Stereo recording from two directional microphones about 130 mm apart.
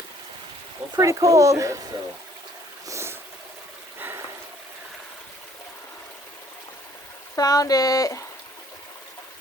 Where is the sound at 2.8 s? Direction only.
20° right (ahead or behind).